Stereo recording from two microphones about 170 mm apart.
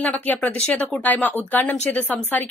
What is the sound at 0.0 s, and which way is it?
Speech, 10° left (ahead or behind).